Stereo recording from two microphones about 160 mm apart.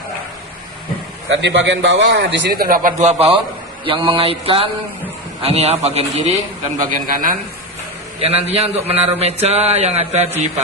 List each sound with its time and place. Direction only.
1.4 s a man's voice: 90° right; by 2.9 s 60° right (ahead or behind)
3.0 s a man's voice: 40° right (ahead or behind)
6.7 s a man's voice: 60° right (ahead or behind)
8.2 s a man's voice: 40° right (ahead or behind)